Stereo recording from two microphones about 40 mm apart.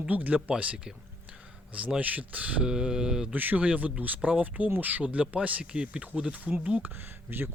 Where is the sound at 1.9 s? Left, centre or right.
Right.